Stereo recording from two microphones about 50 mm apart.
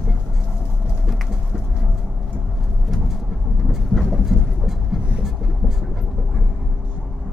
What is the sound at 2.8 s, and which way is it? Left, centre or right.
Bird, centre.